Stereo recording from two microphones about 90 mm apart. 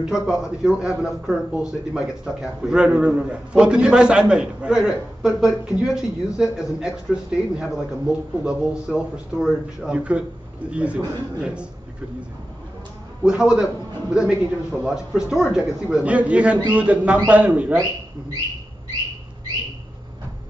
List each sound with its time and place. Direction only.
0.0 s a man's voice: 5° right (ahead or behind)
13.2 s a man's voice: 5° right (ahead or behind)
16.1 s a man's voice: 15° right (ahead or behind)